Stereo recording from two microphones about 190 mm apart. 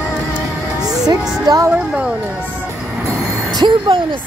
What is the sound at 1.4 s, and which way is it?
Speech, 20° right (ahead or behind).